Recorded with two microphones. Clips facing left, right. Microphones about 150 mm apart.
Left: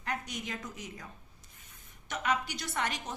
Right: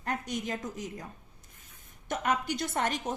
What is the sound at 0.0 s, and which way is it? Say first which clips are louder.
A woman's voice: right 4 dB; 45° right (ahead or behind).